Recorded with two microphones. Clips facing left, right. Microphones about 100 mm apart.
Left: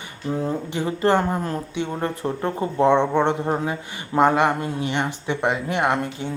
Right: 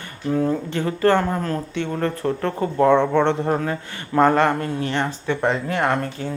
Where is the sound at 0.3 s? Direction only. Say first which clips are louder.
Right 4 dB; 15° left (ahead or behind).